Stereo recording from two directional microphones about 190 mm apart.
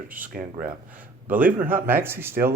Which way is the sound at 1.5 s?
10° right (ahead or behind).